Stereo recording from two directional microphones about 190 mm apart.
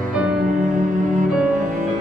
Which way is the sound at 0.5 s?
45° right (ahead or behind).